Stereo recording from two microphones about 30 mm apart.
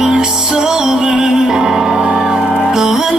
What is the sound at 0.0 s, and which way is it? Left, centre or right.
Music, right.